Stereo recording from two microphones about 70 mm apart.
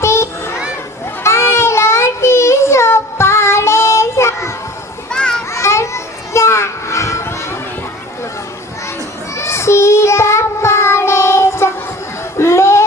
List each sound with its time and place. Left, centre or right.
0.0 s children playing: left
1.2 s child singing: left
5.1 s children playing: centre
5.5 s children playing: left
9.4 s child singing: left
12.4 s a sound: left